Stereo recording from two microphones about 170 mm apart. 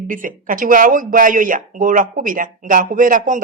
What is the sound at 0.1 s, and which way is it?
Speech, 50° right (ahead or behind).